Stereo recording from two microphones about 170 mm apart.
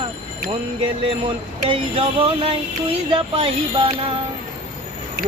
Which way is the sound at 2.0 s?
35° right (ahead or behind).